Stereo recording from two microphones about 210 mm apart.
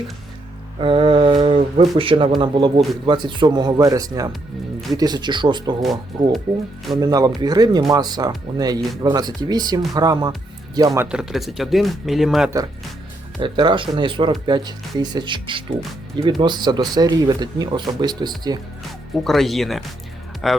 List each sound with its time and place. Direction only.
0.8 s mantra: 25° right (ahead or behind)
1.9 s speech: 25° right (ahead or behind)
5.8 s speech: centre (ahead or behind)
7.0 s speech: 15° right (ahead or behind); by 12.5 s centre (ahead or behind)
13.4 s speech: 20° right (ahead or behind)
19.2 s speech: centre (ahead or behind)